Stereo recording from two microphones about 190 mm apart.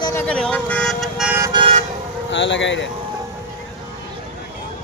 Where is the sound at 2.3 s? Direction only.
80° left.